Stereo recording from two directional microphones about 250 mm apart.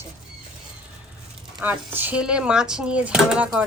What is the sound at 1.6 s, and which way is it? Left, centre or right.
Speech, centre.